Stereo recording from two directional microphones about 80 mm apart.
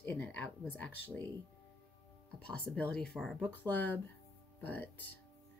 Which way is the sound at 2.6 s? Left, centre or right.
Centre.